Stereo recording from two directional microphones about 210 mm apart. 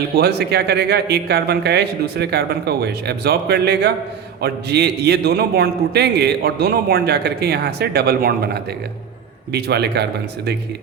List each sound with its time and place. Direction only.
0.2 s a man's voice: 50° right (ahead or behind)